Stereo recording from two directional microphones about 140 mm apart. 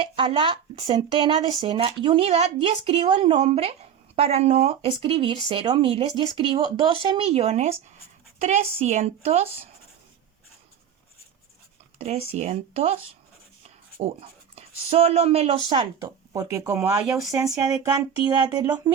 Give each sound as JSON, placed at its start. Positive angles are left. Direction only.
{"t": 0.0, "sound": "speech", "side_deg": -40}
{"t": 11.9, "sound": "speech", "side_deg": -50}
{"t": 14.0, "sound": "speech", "side_deg": -45}
{"t": 16.0, "sound": "speech", "side_deg": -25}